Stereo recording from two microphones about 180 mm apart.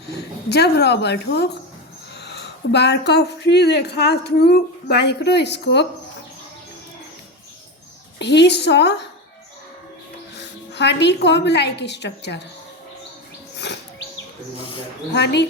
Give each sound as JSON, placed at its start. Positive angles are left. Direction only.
{"t": 0.0, "sound": "speech", "side_deg": 65}
{"t": 8.2, "sound": "speech", "side_deg": 70}
{"t": 10.3, "sound": "a woman's voice", "side_deg": 70}
{"t": 13.6, "sound": "a sound", "side_deg": 70}
{"t": 15.1, "sound": "speech", "side_deg": 70}